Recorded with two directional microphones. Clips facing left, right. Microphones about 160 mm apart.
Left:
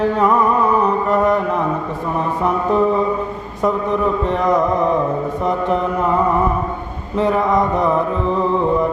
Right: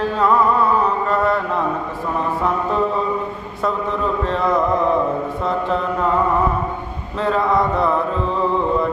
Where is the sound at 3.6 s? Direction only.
15° left (ahead or behind).